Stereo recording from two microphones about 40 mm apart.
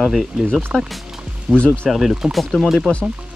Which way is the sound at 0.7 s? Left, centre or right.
Centre.